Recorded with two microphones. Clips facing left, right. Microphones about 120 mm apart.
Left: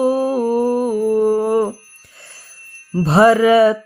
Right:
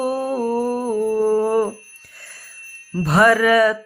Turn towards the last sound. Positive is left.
turn(degrees=25)  # may be behind; listen again after turning